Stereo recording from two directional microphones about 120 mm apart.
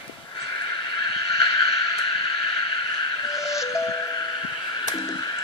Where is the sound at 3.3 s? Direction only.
25° left (ahead or behind).